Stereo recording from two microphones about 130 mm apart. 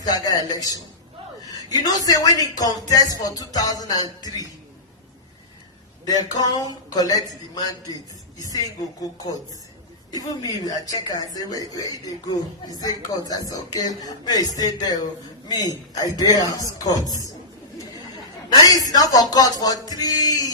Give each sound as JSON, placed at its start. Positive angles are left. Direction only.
{"t": 0.0, "sound": "a man's voice", "side_deg": 30}
{"t": 6.1, "sound": "a man's voice", "side_deg": 30}
{"t": 18.4, "sound": "speech", "side_deg": 30}